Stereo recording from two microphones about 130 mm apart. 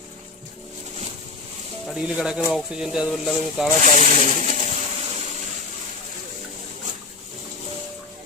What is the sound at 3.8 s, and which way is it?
Speech, 70° right (ahead or behind).